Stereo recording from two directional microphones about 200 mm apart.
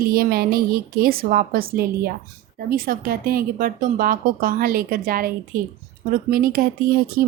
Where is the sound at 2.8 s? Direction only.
45° right (ahead or behind).